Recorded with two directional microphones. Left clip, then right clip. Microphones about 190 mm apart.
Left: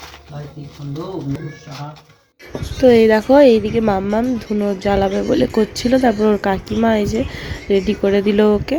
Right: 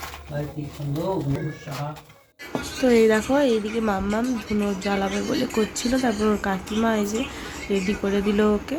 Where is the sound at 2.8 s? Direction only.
25° left (ahead or behind).